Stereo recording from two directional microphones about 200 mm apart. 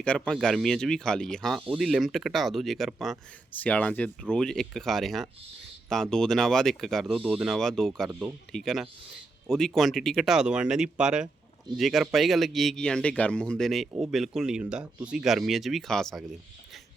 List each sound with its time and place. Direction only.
0.0 s speech: 5° left (ahead or behind)